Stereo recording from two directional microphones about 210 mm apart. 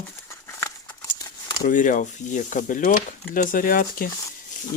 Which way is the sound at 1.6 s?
40° left (ahead or behind).